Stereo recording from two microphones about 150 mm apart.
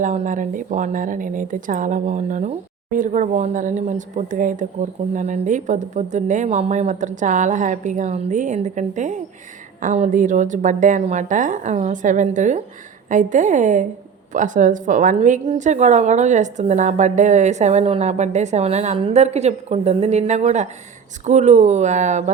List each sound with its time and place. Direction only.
0.0 s a woman's voice: 60° right (ahead or behind)